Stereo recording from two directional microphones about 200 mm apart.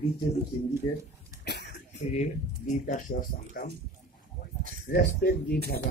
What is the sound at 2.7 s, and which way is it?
Speech, 40° left (ahead or behind).